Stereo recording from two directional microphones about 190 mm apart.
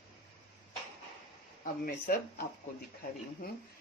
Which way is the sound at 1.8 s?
50° left (ahead or behind).